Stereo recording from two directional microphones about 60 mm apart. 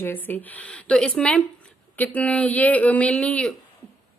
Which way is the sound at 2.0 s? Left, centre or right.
Left.